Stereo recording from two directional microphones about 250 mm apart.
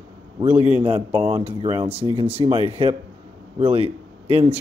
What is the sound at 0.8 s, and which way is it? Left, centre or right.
A man's voice, right.